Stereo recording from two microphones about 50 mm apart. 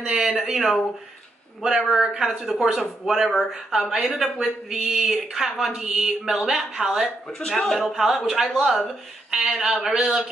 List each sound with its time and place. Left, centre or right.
0.0 s speech: centre
0.5 s speech: centre
1.6 s speech: centre
7.3 s speech: centre
7.8 s speech: centre